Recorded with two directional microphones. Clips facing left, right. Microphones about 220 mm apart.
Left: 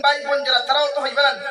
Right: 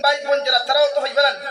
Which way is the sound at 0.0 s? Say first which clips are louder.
Right 2 dB; 25° right (ahead or behind).